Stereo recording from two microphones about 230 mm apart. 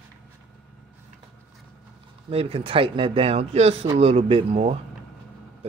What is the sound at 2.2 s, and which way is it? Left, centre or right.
Speech, right.